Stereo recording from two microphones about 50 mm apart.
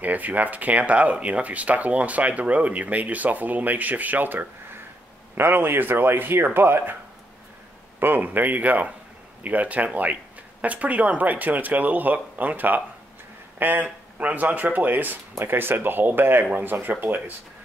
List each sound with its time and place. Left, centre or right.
0.0 s speech: right
8.0 s speech: right